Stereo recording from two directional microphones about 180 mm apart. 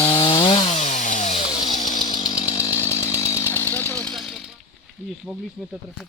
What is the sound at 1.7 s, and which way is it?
Chainsaw, 40° left (ahead or behind).